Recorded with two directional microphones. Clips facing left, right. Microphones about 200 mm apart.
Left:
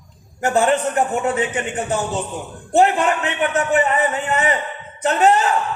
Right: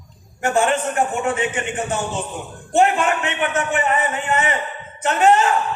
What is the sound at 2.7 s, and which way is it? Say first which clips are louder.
A man's voice: left 1 dB; 35° left (ahead or behind).